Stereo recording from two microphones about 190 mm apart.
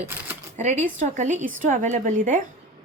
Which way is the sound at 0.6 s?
35° right (ahead or behind).